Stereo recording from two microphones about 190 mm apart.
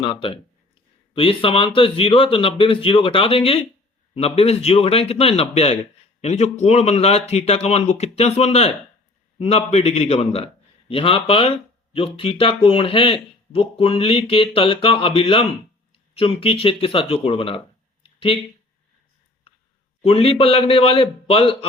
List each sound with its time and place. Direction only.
0.0 s speech: 30° left (ahead or behind)
18.0 s a sound: 30° left (ahead or behind)
20.0 s speech: 30° left (ahead or behind)